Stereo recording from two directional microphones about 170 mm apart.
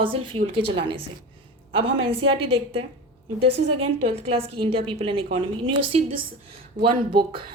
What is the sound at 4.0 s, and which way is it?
A woman's voice, 35° right (ahead or behind).